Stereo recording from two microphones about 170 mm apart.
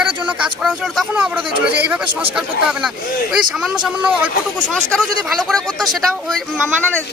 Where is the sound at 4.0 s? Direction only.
10° right (ahead or behind).